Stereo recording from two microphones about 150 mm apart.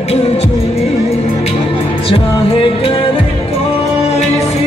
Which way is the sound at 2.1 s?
35° left (ahead or behind).